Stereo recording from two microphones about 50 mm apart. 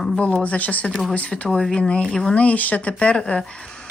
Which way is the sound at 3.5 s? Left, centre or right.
Centre.